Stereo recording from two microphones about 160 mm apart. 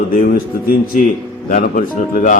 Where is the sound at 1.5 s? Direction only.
55° left (ahead or behind).